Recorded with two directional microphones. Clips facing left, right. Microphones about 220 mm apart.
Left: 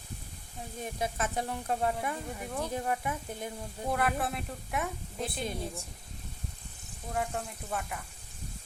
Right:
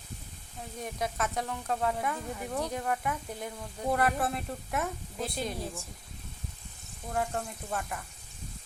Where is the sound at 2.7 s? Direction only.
20° left (ahead or behind).